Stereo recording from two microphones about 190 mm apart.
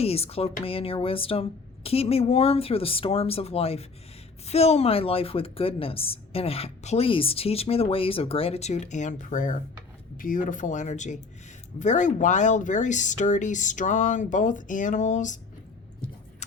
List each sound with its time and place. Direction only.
0.0 s a woman's voice: 30° left (ahead or behind)